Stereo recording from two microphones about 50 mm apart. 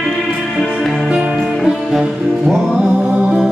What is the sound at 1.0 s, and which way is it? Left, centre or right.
Music, centre.